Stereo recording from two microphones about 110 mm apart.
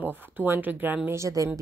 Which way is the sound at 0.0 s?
15° right (ahead or behind).